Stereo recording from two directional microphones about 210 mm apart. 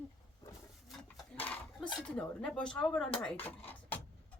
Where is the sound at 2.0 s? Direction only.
5° left (ahead or behind).